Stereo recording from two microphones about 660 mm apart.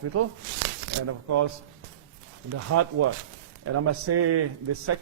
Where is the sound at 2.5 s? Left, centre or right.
Right.